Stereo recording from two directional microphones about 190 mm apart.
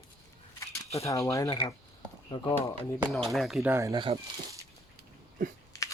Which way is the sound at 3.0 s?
Centre (ahead or behind).